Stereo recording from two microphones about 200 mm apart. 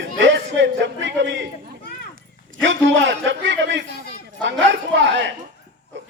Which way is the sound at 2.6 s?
65° right (ahead or behind).